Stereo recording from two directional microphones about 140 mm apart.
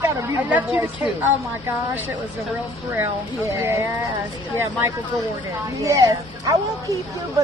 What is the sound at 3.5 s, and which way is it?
Speech, 20° right (ahead or behind).